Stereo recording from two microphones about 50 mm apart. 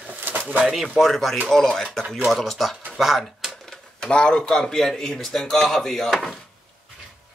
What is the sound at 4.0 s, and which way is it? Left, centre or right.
Speech, centre.